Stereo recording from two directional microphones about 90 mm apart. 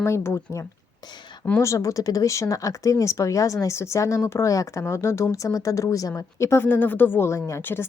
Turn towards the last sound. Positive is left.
turn(degrees=30)  # may be behind; listen again after turning